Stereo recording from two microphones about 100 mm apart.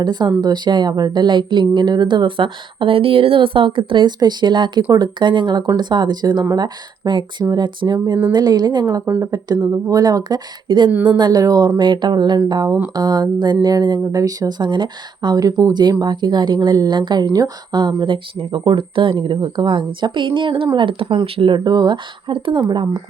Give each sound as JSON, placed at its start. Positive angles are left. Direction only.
{"t": 0.0, "sound": "speech", "side_deg": -45}
{"t": 9.5, "sound": "speech", "side_deg": -40}
{"t": 10.9, "sound": "a woman's voice", "side_deg": -15}
{"t": 11.2, "sound": "speech", "side_deg": -40}